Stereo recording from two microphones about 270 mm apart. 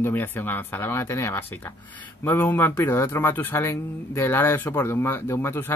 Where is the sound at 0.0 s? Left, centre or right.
Centre.